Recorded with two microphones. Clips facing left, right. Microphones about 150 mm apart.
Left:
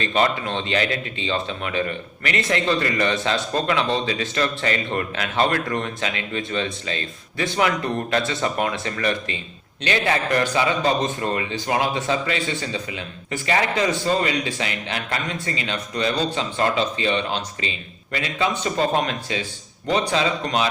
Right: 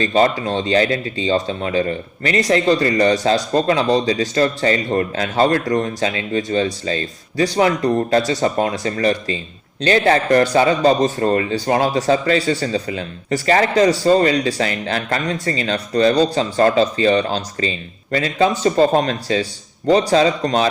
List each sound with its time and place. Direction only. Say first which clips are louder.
0.0 s a man's voice: right 5 dB; 35° right (ahead or behind)